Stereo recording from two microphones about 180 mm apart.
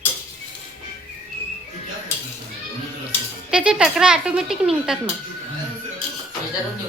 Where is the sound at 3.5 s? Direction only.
5° right (ahead or behind).